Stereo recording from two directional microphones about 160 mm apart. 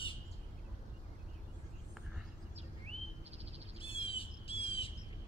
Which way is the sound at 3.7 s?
35° left (ahead or behind).